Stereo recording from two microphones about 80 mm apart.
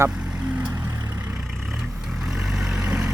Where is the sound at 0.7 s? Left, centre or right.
Right.